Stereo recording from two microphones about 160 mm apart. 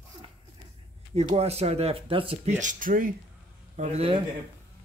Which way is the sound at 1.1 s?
40° right (ahead or behind).